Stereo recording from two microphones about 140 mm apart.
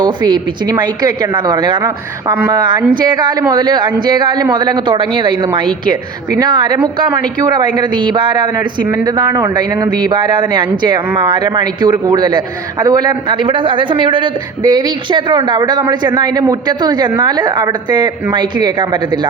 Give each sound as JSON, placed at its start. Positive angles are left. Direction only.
{"t": 0.0, "sound": "speech", "side_deg": -30}